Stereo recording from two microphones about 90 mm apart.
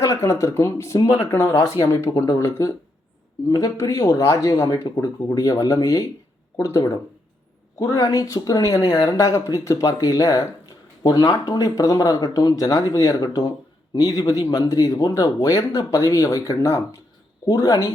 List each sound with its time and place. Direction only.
0.0 s speech: 40° left (ahead or behind)
3.8 s speech: 35° left (ahead or behind)
13.1 s speech: 45° left (ahead or behind)